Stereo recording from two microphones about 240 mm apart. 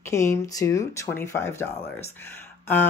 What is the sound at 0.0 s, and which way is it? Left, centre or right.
Speech, centre.